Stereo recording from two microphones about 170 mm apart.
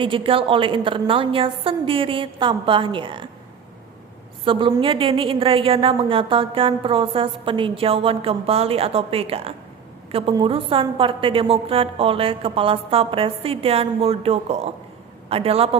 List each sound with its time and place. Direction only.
0.0 s a woman's voice: 30° right (ahead or behind)
4.4 s a woman's voice: 30° right (ahead or behind)